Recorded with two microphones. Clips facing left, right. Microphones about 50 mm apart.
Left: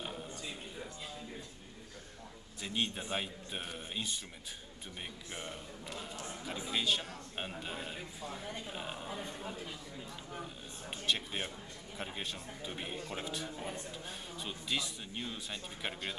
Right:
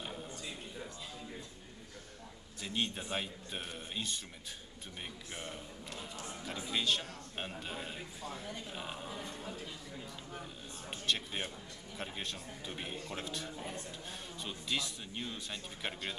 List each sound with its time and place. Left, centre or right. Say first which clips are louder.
0.0 s a sound: left 1 dB; centre
2.6 s a man's voice: left 1 dB; centre
5.3 s a man's voice: left 1 dB; centre
9.1 s a man's voice: left 1 dB; left
10.9 s a man's voice: left 1 dB; centre